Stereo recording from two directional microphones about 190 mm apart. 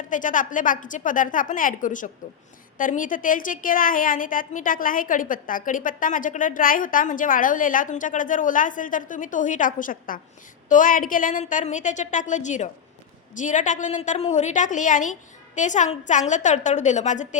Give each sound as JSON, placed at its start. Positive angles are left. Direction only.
{"t": 0.1, "sound": "a woman's voice", "side_deg": 45}